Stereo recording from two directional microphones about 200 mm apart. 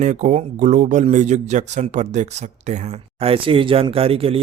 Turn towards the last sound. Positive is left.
turn(degrees=-30)  # may be behind; listen again after turning